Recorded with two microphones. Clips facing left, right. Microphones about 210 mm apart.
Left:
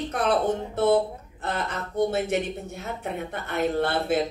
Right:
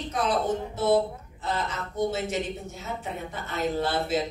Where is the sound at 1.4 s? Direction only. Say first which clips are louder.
Left 1 dB; 60° left (ahead or behind).